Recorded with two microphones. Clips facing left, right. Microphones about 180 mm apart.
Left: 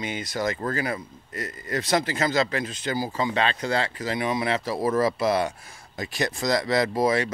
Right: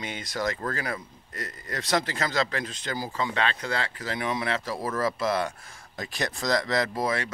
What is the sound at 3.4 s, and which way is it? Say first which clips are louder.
Speech: left 4 dB; 25° left (ahead or behind).